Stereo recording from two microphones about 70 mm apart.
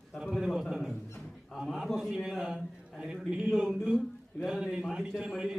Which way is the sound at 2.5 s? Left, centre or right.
Centre.